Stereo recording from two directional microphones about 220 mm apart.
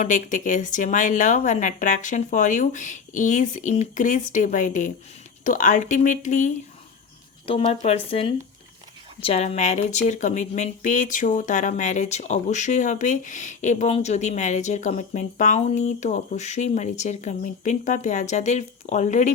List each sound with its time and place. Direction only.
0.0 s speech: 35° left (ahead or behind)